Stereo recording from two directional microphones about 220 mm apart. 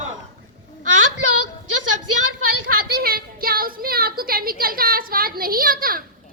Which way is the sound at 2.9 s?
40° right (ahead or behind).